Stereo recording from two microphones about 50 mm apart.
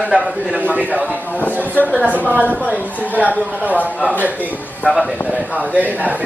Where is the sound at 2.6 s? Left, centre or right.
Right.